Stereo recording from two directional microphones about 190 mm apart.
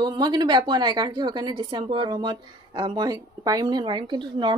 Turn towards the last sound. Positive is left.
turn(degrees=-25)  # may be behind; listen again after turning